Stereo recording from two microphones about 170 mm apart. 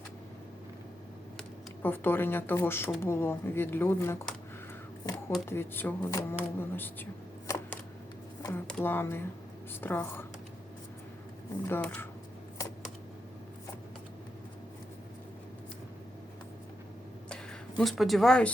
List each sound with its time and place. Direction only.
1.8 s speech: 10° left (ahead or behind)
5.5 s speech: 15° left (ahead or behind)
8.4 s a sound: 20° left (ahead or behind)
8.6 s speech: 10° left (ahead or behind)
11.7 s speech: 10° left (ahead or behind)
17.2 s a sound: 5° left (ahead or behind)